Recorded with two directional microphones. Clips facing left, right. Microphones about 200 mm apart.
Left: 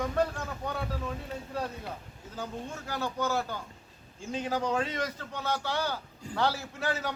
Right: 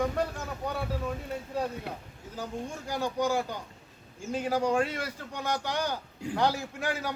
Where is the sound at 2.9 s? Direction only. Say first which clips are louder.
Right 3 dB; 15° right (ahead or behind).